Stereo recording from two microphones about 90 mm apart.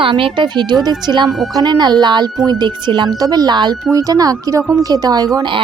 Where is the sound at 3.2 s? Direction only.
45° right (ahead or behind).